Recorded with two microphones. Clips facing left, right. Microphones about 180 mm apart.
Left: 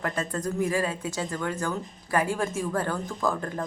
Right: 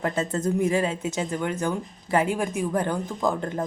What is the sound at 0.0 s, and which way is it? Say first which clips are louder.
Speech: right 4 dB; 25° right (ahead or behind).